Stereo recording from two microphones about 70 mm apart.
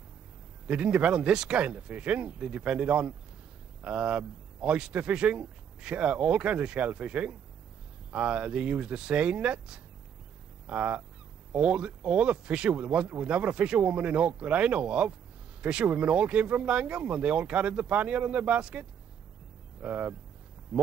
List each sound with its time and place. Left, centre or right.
0.7 s speech: centre